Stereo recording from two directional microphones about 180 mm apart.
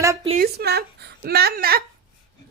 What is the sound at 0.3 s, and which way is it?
A woman's voice, 60° right (ahead or behind).